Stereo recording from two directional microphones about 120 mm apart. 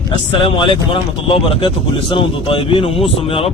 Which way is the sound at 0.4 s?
45° left (ahead or behind).